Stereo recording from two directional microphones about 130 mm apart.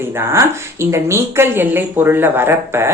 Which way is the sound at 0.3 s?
20° right (ahead or behind).